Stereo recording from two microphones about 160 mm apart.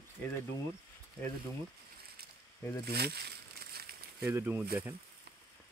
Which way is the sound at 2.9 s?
90° right.